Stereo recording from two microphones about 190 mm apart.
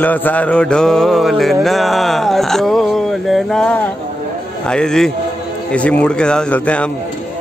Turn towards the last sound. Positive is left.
turn(degrees=5)  # may be behind; listen again after turning